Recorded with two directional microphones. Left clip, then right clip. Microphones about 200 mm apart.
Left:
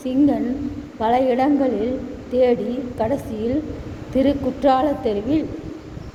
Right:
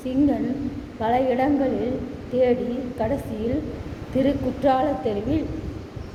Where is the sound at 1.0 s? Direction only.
35° left (ahead or behind).